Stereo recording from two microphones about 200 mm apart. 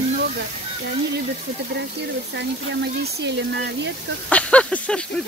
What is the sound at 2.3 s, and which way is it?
Speech, 60° right (ahead or behind).